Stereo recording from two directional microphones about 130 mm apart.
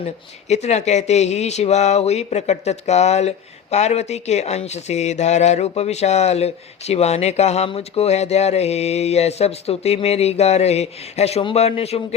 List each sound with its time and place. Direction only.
0.4 s speech: 60° left (ahead or behind)